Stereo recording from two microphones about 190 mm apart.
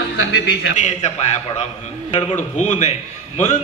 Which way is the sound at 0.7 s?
35° left (ahead or behind).